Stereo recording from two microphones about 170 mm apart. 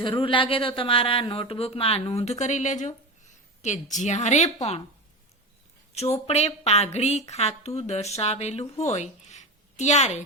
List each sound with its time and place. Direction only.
0.0 s a woman's voice: 30° left (ahead or behind)
5.9 s a woman's voice: 40° left (ahead or behind)